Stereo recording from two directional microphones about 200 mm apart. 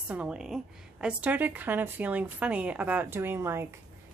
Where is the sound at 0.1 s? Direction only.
5° right (ahead or behind).